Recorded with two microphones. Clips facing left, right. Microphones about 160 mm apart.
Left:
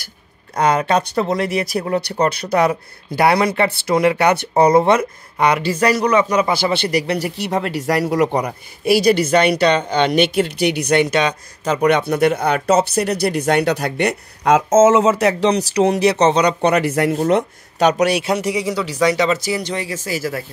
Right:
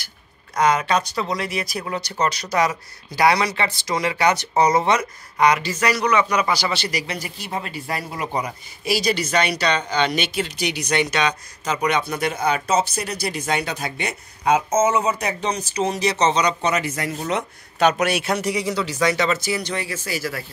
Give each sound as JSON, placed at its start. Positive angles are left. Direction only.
{"t": 0.6, "sound": "speech", "side_deg": 55}
{"t": 5.8, "sound": "speech", "side_deg": 35}
{"t": 6.5, "sound": "speech", "side_deg": 55}
{"t": 17.2, "sound": "speech", "side_deg": 45}
{"t": 17.9, "sound": "speech", "side_deg": 15}